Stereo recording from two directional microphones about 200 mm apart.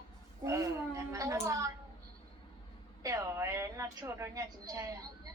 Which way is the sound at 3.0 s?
15° right (ahead or behind).